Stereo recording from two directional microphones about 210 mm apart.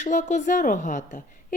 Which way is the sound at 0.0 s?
35° left (ahead or behind).